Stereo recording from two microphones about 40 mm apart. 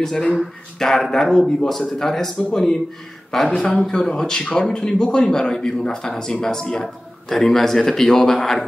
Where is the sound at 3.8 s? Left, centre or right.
Centre.